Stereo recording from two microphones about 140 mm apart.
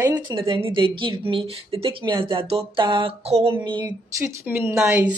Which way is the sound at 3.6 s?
35° right (ahead or behind).